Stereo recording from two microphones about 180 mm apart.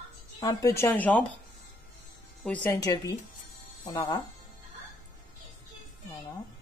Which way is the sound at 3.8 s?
25° left (ahead or behind).